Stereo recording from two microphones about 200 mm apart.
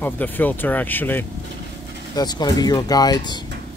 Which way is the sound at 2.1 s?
20° left (ahead or behind).